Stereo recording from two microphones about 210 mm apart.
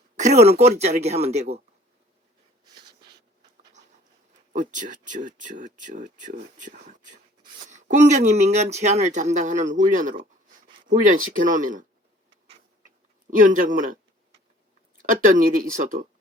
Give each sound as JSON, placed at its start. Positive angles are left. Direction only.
{"t": 0.2, "sound": "speech", "side_deg": -30}
{"t": 4.5, "sound": "speech", "side_deg": -35}
{"t": 13.3, "sound": "speech", "side_deg": -40}
{"t": 15.2, "sound": "speech", "side_deg": -40}